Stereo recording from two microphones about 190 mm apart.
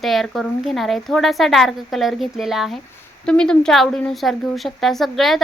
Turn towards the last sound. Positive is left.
turn(degrees=0)  # may be behind; listen again after turning